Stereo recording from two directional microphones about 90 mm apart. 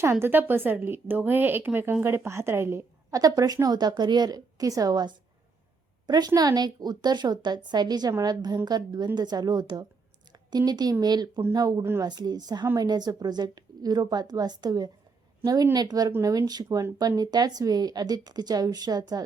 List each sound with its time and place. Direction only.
0.0 s a woman's voice: 30° right (ahead or behind)
3.1 s a woman's voice: 40° right (ahead or behind)
16.6 s speech: 30° right (ahead or behind)
17.0 s a woman's voice: 45° right (ahead or behind)